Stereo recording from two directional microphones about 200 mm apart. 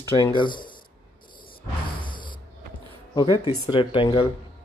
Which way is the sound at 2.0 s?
25° left (ahead or behind).